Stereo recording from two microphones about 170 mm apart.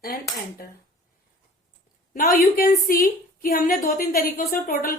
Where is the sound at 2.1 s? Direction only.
55° left (ahead or behind).